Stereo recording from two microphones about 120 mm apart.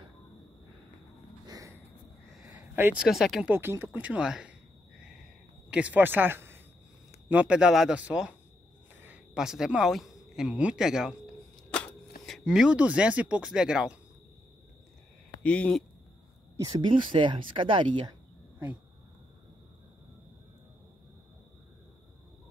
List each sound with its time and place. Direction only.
1.4 s a sound: 30° right (ahead or behind)
3.0 s speech: 5° right (ahead or behind)
3.5 s speech: 20° right (ahead or behind)
5.7 s speech: 10° right (ahead or behind)
15.4 s speech: 10° left (ahead or behind)
16.5 s speech: 35° right (ahead or behind)